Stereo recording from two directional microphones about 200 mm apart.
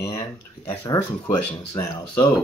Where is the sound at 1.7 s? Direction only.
20° left (ahead or behind).